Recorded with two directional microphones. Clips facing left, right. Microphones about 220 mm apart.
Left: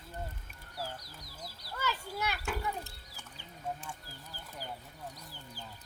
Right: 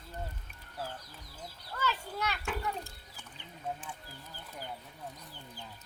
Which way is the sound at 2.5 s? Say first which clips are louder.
Even; centre (ahead or behind).